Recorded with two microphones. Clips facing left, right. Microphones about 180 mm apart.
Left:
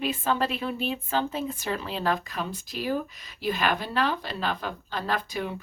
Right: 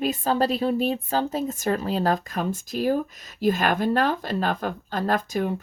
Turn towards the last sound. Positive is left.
turn(degrees=-45)  # may be behind; listen again after turning